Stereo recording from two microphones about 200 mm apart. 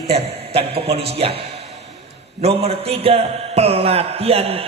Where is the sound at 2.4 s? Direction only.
30° right (ahead or behind).